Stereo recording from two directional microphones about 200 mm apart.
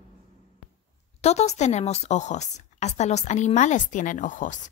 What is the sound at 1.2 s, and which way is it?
Speech, 35° left (ahead or behind).